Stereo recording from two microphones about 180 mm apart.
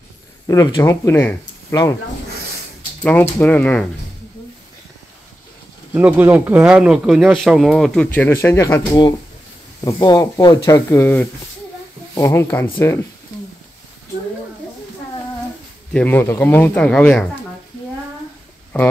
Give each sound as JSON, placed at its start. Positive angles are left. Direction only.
{"t": 0.5, "sound": "speech", "side_deg": 20}
{"t": 3.0, "sound": "speech", "side_deg": 10}
{"t": 5.9, "sound": "speech", "side_deg": -10}
{"t": 15.9, "sound": "speech", "side_deg": 10}